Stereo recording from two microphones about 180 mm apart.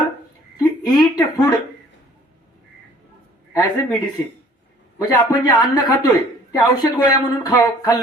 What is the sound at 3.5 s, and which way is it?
Speech, 20° left (ahead or behind).